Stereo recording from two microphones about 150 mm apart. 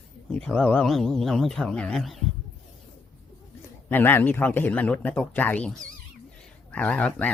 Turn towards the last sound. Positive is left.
turn(degrees=10)  # may be behind; listen again after turning